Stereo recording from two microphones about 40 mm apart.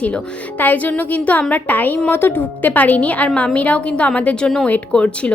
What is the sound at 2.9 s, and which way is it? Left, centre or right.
Speech, left.